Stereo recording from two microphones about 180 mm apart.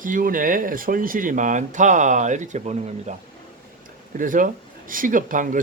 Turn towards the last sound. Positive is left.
turn(degrees=-45)  # may be behind; listen again after turning